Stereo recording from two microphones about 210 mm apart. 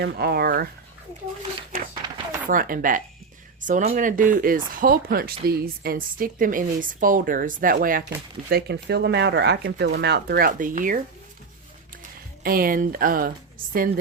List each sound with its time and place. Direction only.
0.0 s speech: 50° right (ahead or behind)
2.5 s speech: 40° right (ahead or behind)
12.4 s speech: 45° right (ahead or behind)